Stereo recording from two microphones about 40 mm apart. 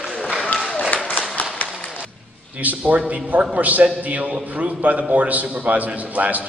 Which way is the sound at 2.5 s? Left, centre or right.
Right.